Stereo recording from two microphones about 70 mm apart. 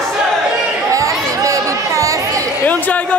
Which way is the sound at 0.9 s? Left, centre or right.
Right.